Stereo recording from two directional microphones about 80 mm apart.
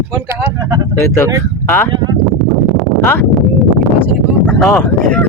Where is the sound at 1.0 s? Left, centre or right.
Left.